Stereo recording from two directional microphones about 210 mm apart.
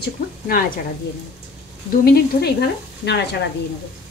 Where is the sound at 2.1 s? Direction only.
50° left (ahead or behind).